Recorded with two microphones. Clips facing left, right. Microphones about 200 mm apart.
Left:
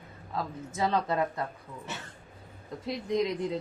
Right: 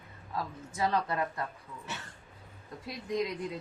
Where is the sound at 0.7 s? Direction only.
20° left (ahead or behind).